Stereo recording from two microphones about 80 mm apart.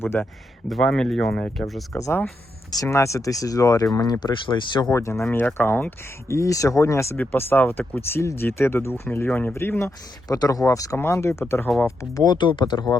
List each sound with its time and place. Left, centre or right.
0.0 s speech: left
0.7 s speech: centre
1.9 s speech: left
4.2 s speech: left
4.9 s speech: left
6.3 s speech: left
7.2 s speech: left
10.2 s speech: left
10.9 s speech: left
12.2 s speech: left